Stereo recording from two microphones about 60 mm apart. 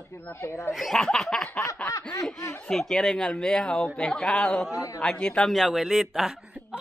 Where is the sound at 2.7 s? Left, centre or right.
Centre.